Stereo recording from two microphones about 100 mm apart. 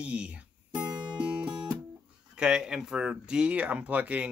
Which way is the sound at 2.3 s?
10° right (ahead or behind).